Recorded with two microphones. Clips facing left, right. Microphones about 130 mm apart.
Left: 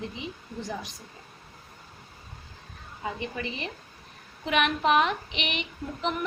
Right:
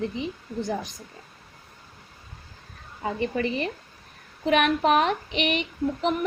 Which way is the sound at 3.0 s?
45° right (ahead or behind).